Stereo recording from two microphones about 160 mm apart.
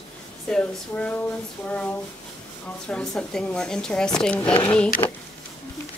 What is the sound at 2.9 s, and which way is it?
Speech, 5° left (ahead or behind).